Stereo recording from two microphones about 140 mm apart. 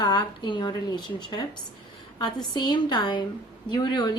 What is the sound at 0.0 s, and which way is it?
A woman's voice, 30° left (ahead or behind).